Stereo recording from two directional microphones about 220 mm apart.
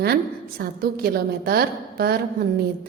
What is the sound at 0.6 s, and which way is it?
A woman's voice, 45° right (ahead or behind).